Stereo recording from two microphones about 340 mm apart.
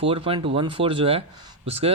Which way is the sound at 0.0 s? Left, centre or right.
Centre.